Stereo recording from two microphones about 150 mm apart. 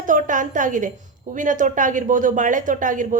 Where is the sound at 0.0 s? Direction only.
60° right (ahead or behind).